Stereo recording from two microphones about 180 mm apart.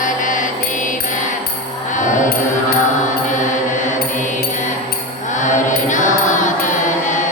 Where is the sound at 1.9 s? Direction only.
45° left (ahead or behind).